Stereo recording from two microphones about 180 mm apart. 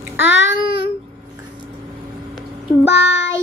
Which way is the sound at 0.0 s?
10° right (ahead or behind).